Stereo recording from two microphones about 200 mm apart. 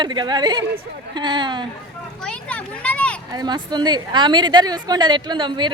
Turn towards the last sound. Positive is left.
turn(degrees=-25)  # may be behind; listen again after turning